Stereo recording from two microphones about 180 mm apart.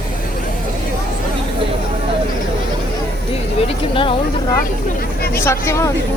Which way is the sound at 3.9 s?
30° left (ahead or behind).